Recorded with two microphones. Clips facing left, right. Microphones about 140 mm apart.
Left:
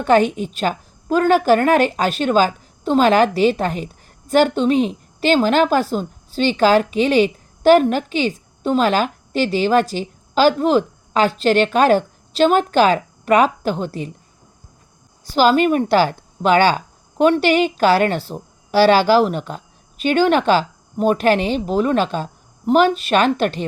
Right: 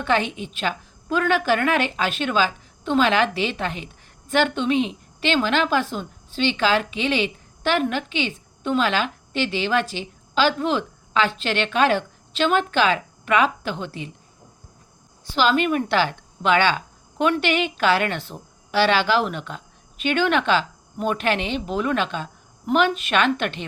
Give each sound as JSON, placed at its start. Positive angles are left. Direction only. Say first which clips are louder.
{"t": 0.0, "sound": "a woman's voice", "louder": "left 8 dB", "side_deg": 45}
{"t": 15.2, "sound": "a woman's voice", "louder": "left 6 dB", "side_deg": 40}